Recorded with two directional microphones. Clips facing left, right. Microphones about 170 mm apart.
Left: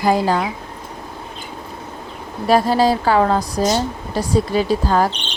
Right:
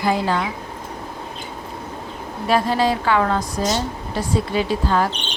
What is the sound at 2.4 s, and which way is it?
Speech, 40° left (ahead or behind).